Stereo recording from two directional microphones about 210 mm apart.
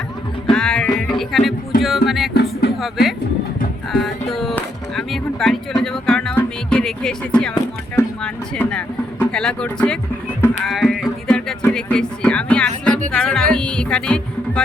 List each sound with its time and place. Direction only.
0.5 s music: 5° left (ahead or behind)
1.2 s speech: centre (ahead or behind)
2.3 s music: 50° left (ahead or behind)
2.8 s speech: centre (ahead or behind)
4.0 s music: centre (ahead or behind)